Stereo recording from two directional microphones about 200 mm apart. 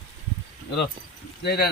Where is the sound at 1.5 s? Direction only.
50° left (ahead or behind).